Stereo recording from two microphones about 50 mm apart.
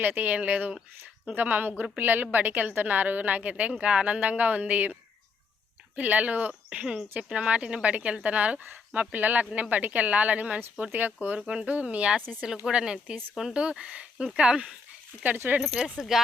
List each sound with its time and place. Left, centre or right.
0.0 s a woman's voice: right
3.6 s speech: right
6.0 s speech: right
6.5 s a woman's voice: centre
11.3 s a woman's voice: centre